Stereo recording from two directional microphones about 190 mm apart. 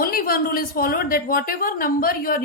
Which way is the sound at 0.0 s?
50° left (ahead or behind).